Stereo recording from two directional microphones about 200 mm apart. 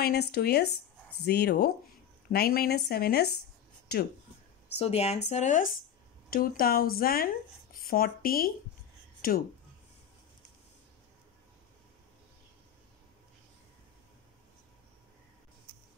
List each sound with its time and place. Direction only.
0.0 s speech: 55° left (ahead or behind)
4.7 s speech: 30° left (ahead or behind)